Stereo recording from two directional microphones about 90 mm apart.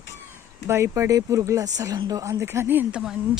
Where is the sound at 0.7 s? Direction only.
30° right (ahead or behind).